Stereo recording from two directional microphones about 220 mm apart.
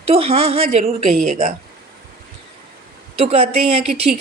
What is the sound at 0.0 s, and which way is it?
A woman's voice, 25° right (ahead or behind).